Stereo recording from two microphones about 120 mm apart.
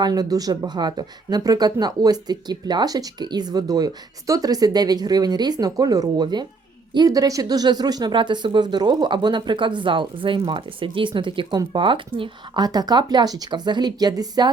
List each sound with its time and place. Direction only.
0.0 s speech: 30° right (ahead or behind)
12.6 s speech: 35° right (ahead or behind)